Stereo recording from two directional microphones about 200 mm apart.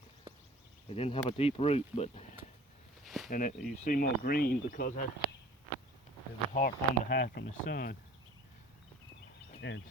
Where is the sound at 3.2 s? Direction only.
45° left (ahead or behind).